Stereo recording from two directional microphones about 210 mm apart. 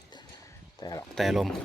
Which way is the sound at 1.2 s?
Centre (ahead or behind).